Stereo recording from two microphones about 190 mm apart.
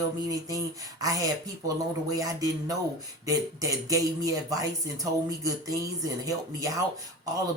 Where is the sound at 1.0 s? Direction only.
20° right (ahead or behind).